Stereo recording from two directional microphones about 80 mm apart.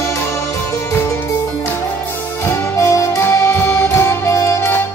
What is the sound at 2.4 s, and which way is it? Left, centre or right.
Music, left.